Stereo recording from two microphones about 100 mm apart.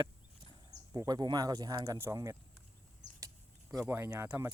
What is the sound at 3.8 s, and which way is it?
Speech, 25° right (ahead or behind).